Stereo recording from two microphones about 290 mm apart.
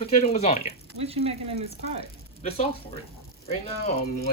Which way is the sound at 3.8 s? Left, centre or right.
Left.